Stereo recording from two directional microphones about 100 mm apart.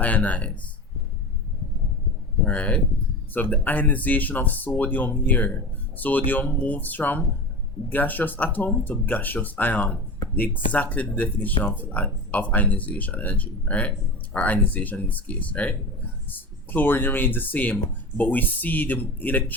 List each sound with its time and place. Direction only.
0.0 s speech: 15° left (ahead or behind)
2.5 s speech: 10° left (ahead or behind)